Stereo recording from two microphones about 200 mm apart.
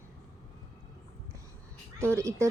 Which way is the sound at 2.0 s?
15° right (ahead or behind).